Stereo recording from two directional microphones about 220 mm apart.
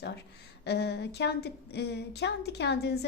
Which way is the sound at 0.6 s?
50° left (ahead or behind).